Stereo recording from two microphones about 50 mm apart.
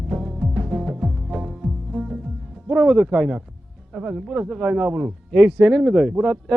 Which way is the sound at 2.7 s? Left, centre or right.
Right.